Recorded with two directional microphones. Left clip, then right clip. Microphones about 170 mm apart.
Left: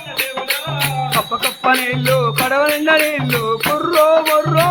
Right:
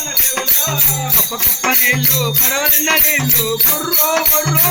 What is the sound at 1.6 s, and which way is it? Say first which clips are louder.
Music: right 1 dB; 15° left (ahead or behind).